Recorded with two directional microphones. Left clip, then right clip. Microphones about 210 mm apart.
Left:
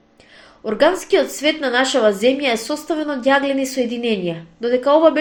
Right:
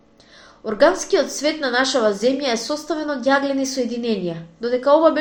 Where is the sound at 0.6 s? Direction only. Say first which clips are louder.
Even; 30° left (ahead or behind).